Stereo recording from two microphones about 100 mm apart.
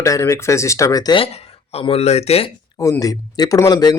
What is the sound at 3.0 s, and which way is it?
Speech, 40° left (ahead or behind).